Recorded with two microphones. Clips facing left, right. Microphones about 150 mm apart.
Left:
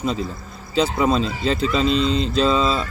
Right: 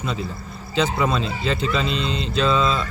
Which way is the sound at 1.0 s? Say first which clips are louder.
Left 3 dB; 35° left (ahead or behind).